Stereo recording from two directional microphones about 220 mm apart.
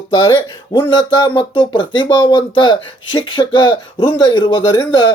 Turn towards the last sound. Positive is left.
turn(degrees=20)  # may be behind; listen again after turning